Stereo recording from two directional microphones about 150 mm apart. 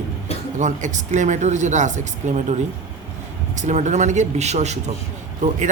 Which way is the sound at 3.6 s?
50° right (ahead or behind).